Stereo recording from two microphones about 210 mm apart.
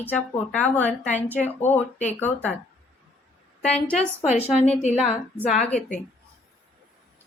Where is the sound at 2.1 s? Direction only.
10° left (ahead or behind).